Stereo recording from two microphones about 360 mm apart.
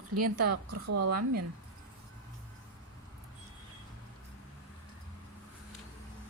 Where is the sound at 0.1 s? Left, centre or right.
Right.